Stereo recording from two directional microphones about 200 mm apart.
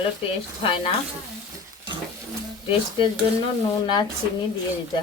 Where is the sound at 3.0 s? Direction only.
25° left (ahead or behind).